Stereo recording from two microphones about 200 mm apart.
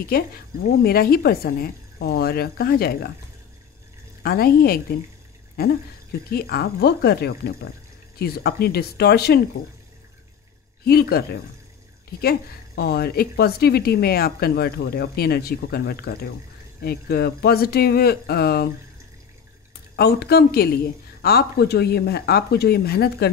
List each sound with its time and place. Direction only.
0.1 s speech: 50° left (ahead or behind)
4.2 s speech: 50° left (ahead or behind)
6.3 s speech: 50° left (ahead or behind)
10.9 s speech: 50° left (ahead or behind)
20.0 s speech: 55° left (ahead or behind)